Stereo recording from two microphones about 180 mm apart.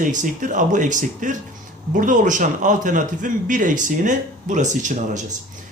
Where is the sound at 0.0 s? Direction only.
45° right (ahead or behind).